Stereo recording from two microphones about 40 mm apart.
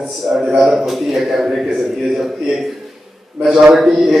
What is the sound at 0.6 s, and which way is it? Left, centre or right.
A man's voice, centre.